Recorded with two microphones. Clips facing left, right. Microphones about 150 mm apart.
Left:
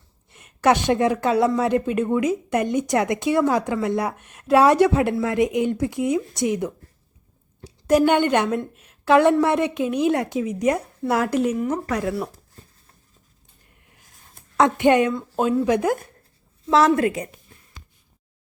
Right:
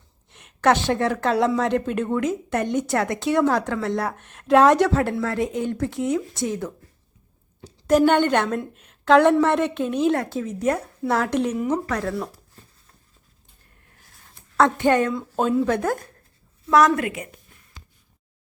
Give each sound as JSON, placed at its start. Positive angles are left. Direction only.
{"t": 0.3, "sound": "a woman's voice", "side_deg": 5}
{"t": 14.1, "sound": "a sound", "side_deg": 15}
{"t": 15.1, "sound": "speech", "side_deg": 0}
{"t": 16.7, "sound": "a woman's voice", "side_deg": 30}